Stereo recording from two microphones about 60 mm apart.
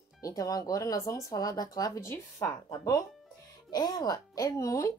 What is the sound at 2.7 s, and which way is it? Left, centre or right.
Speech, left.